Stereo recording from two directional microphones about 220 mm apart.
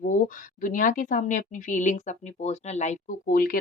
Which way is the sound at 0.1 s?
35° left (ahead or behind).